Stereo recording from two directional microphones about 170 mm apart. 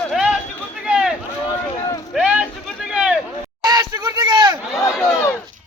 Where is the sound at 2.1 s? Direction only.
5° right (ahead or behind).